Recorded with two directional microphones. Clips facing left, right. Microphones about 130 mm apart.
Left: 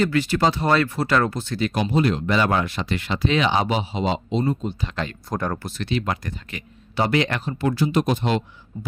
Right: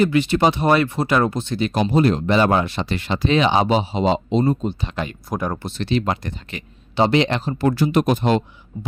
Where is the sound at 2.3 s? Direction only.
25° right (ahead or behind).